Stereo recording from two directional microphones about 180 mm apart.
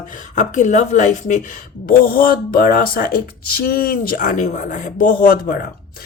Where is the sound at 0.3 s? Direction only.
40° left (ahead or behind).